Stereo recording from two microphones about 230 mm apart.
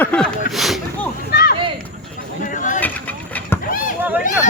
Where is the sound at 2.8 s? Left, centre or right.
Centre.